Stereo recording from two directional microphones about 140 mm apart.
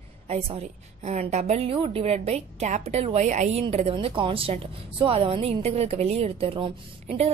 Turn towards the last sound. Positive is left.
turn(degrees=-40)  # may be behind; listen again after turning